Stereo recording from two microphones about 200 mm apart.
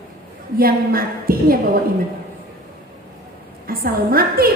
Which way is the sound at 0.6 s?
45° right (ahead or behind).